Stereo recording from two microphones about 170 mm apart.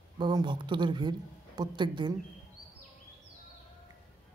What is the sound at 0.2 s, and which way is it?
A man's voice, 25° right (ahead or behind).